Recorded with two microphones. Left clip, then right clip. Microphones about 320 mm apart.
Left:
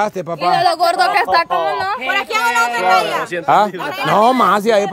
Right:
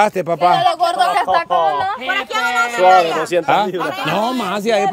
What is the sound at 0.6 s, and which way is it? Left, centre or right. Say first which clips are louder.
Speech: left 1 dB; left.